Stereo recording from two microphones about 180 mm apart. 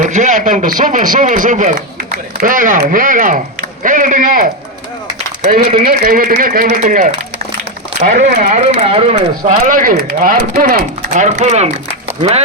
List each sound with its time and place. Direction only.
0.0 s a man's voice: 45° right (ahead or behind)
9.4 s a man's voice: 50° right (ahead or behind)